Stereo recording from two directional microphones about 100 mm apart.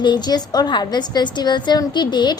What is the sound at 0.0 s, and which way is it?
A woman's voice, 50° left (ahead or behind).